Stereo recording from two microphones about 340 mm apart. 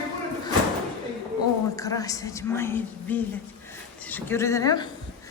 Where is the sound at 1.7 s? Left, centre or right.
Centre.